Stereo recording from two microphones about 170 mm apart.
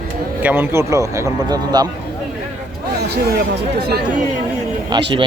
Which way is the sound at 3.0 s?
75° right (ahead or behind).